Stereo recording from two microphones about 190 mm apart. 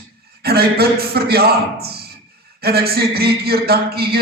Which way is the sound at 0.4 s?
55° right (ahead or behind).